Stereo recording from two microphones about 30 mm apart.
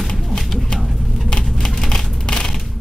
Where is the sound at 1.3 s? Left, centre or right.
Left.